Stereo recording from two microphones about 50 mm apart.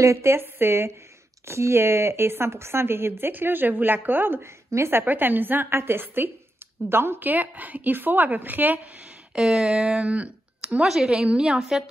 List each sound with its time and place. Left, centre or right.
0.0 s speech: right
4.6 s speech: right
5.0 s a woman's voice: right
5.7 s speech: right
7.2 s a woman's voice: right
9.4 s speech: centre; by 10.8 s right
10.8 s a woman's voice: centre